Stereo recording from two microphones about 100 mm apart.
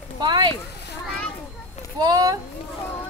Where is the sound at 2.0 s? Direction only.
35° right (ahead or behind).